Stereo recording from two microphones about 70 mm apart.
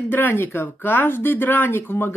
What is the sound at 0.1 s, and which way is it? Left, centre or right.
Speech, left.